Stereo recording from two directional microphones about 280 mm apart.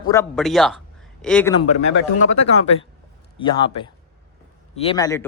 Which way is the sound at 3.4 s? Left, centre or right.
Centre.